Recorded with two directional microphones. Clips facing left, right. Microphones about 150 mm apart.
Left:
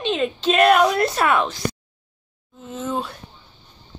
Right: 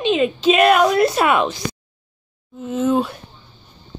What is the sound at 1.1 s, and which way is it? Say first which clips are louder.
A woman's voice: right 3 dB; 15° right (ahead or behind).